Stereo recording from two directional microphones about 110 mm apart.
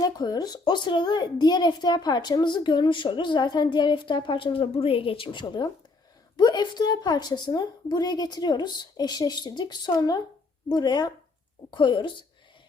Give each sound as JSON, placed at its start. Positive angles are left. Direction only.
{"t": 0.0, "sound": "a woman's voice", "side_deg": 35}